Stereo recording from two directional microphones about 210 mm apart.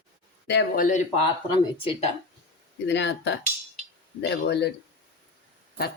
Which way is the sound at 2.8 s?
55° left (ahead or behind).